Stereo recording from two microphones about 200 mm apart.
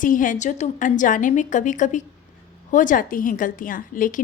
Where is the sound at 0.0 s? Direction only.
40° left (ahead or behind).